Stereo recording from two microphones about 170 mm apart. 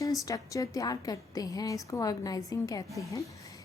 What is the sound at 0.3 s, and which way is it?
A woman's voice, 20° left (ahead or behind).